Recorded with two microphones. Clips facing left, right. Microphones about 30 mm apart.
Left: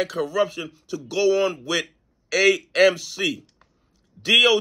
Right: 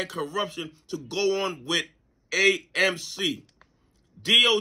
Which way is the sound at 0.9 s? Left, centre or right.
Right.